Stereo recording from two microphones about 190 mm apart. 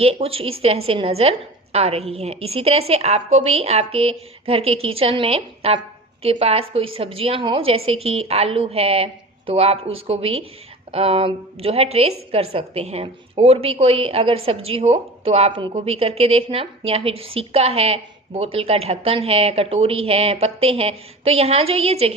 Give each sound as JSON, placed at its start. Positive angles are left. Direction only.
{"t": 0.0, "sound": "a woman's voice", "side_deg": -30}